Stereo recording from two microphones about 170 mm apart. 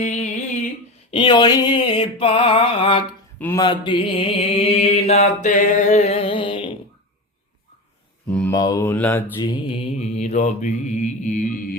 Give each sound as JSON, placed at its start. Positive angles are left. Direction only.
{"t": 0.0, "sound": "a sound", "side_deg": 45}
{"t": 1.1, "sound": "a sound", "side_deg": 30}
{"t": 3.6, "sound": "mantra", "side_deg": 30}
{"t": 8.3, "sound": "mantra", "side_deg": 5}
{"t": 8.5, "sound": "mantra", "side_deg": 20}
{"t": 9.4, "sound": "mantra", "side_deg": 30}